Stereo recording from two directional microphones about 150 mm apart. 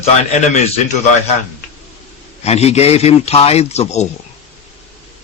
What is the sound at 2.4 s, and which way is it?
Speech, 45° left (ahead or behind).